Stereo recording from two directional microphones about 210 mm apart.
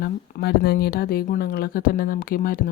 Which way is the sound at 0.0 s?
50° left (ahead or behind).